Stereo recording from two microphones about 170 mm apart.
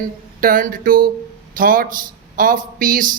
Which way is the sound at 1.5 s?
55° right (ahead or behind).